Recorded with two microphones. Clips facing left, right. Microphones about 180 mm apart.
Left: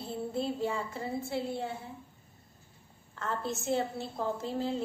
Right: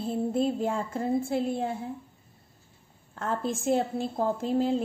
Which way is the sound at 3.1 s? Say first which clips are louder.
Right 5 dB; 50° right (ahead or behind).